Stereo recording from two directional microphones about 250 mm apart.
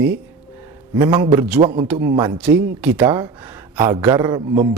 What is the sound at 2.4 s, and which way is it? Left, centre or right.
A man's voice, centre.